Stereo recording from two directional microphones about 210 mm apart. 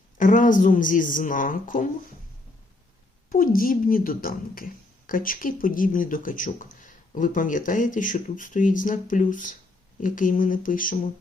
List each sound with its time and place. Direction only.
0.2 s speech: 40° left (ahead or behind)
3.2 s speech: 40° left (ahead or behind)